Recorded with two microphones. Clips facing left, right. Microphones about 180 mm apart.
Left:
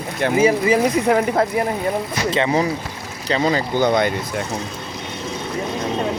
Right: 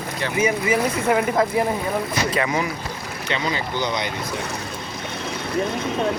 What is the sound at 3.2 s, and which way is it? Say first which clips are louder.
Speech: left 7 dB; 40° left (ahead or behind).